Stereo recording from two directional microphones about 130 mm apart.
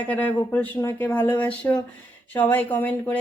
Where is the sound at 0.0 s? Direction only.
10° left (ahead or behind).